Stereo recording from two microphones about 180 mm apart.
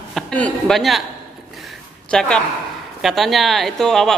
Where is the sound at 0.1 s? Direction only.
5° left (ahead or behind).